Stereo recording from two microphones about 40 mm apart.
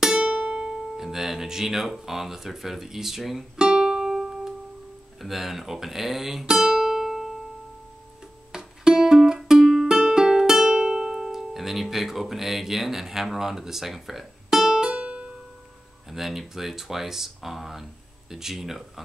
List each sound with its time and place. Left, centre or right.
0.0 s music: centre
0.3 s music: right
0.7 s speech: centre
3.5 s music: centre
5.2 s speech: centre
6.7 s music: centre
8.5 s music: centre
15.0 s music: right
16.1 s speech: centre